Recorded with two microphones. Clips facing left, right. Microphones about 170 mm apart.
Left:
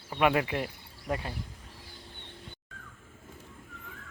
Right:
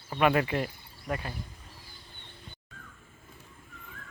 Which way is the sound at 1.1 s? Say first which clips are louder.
Left 1 dB; 25° left (ahead or behind).